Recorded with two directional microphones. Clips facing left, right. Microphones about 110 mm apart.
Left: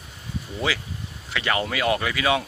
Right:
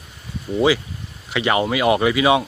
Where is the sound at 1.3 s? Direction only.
20° right (ahead or behind).